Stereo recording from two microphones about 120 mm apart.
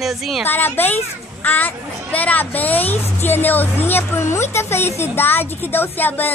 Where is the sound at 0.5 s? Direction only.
15° left (ahead or behind).